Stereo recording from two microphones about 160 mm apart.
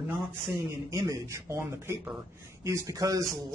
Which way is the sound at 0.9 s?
25° right (ahead or behind).